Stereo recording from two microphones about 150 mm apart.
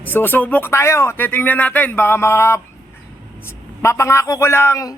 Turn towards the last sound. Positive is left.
turn(degrees=20)  # may be behind; listen again after turning